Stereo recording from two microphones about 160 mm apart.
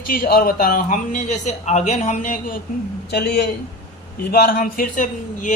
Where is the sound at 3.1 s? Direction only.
85° left.